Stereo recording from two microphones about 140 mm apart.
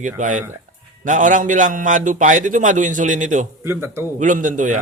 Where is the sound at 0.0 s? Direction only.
60° right (ahead or behind).